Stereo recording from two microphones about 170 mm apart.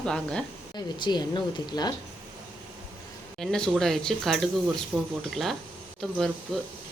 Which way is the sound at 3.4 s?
5° left (ahead or behind).